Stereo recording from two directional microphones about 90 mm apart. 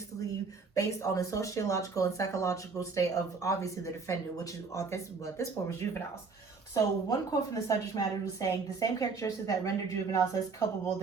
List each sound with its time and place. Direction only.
0.7 s speech: 35° left (ahead or behind)